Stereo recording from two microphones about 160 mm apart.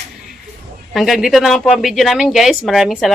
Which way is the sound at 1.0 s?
Centre (ahead or behind).